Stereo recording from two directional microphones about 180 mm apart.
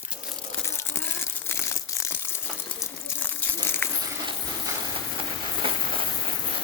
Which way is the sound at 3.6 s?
10° left (ahead or behind).